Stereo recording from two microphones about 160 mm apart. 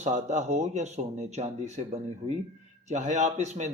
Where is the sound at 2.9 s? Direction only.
50° right (ahead or behind).